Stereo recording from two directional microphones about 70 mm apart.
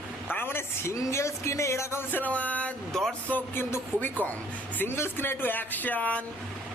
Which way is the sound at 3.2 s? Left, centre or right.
Left.